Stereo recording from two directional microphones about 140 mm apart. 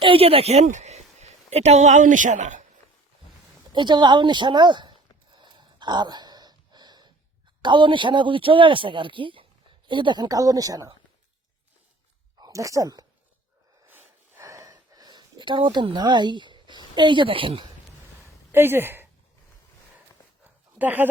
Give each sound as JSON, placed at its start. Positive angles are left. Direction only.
{"t": 0.0, "sound": "a woman's voice", "side_deg": -40}
{"t": 3.7, "sound": "a man's voice", "side_deg": -30}
{"t": 5.3, "sound": "gasp", "side_deg": -35}
{"t": 7.6, "sound": "a man's voice", "side_deg": -35}
{"t": 12.4, "sound": "speech", "side_deg": -20}
{"t": 13.8, "sound": "a sound", "side_deg": -15}
{"t": 18.5, "sound": "speech", "side_deg": -15}
{"t": 20.4, "sound": "dog", "side_deg": -10}